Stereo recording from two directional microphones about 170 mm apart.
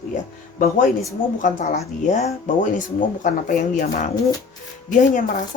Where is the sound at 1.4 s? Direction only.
50° left (ahead or behind).